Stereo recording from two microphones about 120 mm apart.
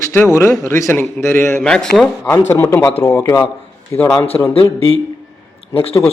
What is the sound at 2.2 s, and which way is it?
A man's voice, 20° left (ahead or behind).